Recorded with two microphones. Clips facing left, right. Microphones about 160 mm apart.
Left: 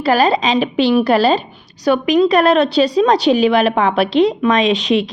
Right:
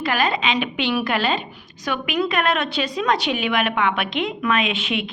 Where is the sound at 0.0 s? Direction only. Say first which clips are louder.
Left 8 dB; 35° left (ahead or behind).